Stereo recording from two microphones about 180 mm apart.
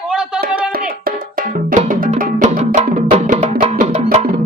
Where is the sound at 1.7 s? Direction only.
45° right (ahead or behind).